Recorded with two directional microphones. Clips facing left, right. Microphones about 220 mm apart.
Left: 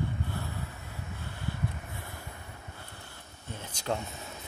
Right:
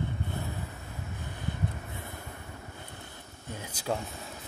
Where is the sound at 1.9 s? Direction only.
20° right (ahead or behind).